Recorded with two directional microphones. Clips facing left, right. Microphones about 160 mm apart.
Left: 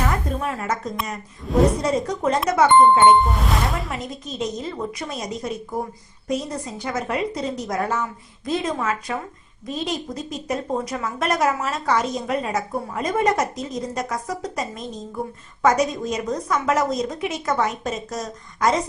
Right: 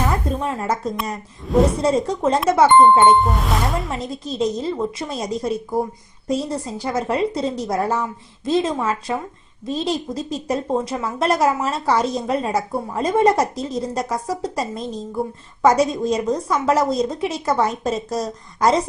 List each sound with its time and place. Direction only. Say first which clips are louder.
0.3 s a woman's voice: right 3 dB; 30° right (ahead or behind)
1.5 s speech: right 1 dB; centre (ahead or behind)
1.8 s a woman's voice: right 3 dB; 30° right (ahead or behind)
3.0 s speech: even; centre (ahead or behind)
3.9 s a woman's voice: right 4 dB; 30° right (ahead or behind)